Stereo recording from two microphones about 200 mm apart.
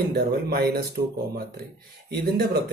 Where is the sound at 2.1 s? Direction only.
50° right (ahead or behind).